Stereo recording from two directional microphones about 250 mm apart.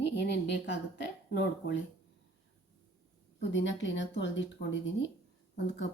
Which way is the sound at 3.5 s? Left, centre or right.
Left.